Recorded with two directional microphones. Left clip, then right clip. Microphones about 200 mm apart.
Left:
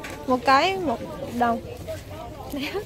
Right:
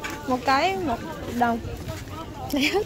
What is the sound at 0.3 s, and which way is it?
Speech, 20° left (ahead or behind).